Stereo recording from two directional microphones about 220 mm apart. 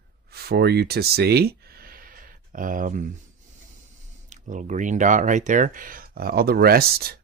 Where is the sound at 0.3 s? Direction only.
45° right (ahead or behind).